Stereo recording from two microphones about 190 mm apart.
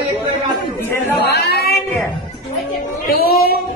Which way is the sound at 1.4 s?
55° left (ahead or behind).